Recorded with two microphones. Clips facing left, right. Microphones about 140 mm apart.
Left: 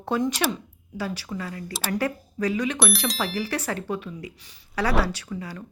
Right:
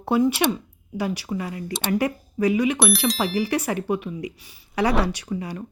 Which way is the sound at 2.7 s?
Centre (ahead or behind).